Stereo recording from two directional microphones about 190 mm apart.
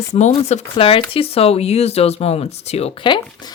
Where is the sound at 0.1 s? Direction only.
35° left (ahead or behind).